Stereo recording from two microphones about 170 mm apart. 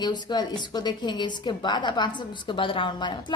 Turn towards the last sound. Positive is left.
turn(degrees=25)  # may be behind; listen again after turning